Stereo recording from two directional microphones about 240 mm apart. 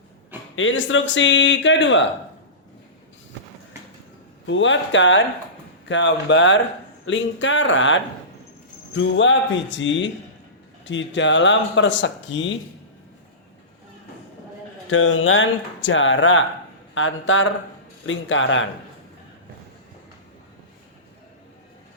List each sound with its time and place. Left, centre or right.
0.5 s speech: left
4.4 s speech: left
14.8 s speech: left